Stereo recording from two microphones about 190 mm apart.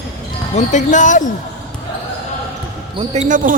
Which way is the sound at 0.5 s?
40° left (ahead or behind).